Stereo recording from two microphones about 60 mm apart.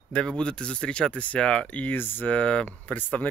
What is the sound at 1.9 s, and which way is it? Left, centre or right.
Speech, left.